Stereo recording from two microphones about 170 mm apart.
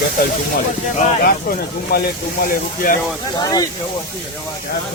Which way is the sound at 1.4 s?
60° left (ahead or behind).